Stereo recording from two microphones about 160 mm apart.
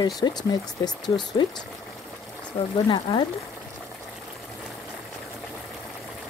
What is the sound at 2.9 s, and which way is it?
Speech, 30° left (ahead or behind).